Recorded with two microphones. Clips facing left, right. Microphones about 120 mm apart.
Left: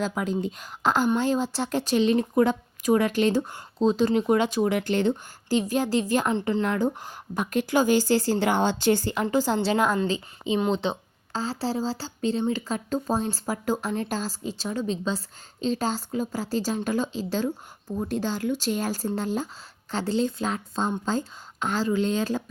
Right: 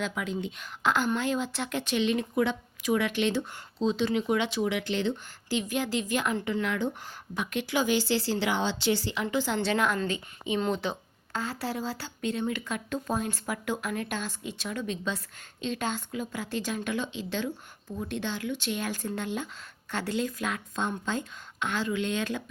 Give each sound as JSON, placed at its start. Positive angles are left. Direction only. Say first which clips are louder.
{"t": 0.0, "sound": "a woman's voice", "louder": "left 5 dB", "side_deg": 40}